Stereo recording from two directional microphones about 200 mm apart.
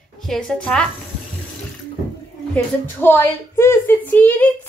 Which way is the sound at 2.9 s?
10° left (ahead or behind).